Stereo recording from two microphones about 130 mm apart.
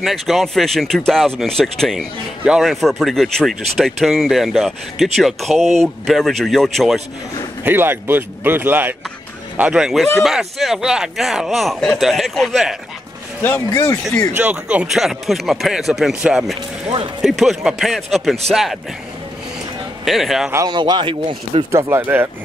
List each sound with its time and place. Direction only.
0.0 s speech: centre (ahead or behind)
7.6 s speech: 15° right (ahead or behind); by 12.7 s centre (ahead or behind)
14.3 s speech: 10° right (ahead or behind)
20.1 s speech: centre (ahead or behind)
20.5 s speech: 30° right (ahead or behind)
21.7 s speech: 20° right (ahead or behind)